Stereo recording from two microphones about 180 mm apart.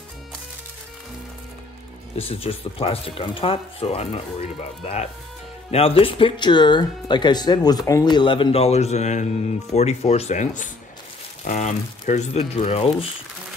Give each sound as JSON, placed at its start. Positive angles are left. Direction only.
{"t": 2.1, "sound": "speech", "side_deg": 30}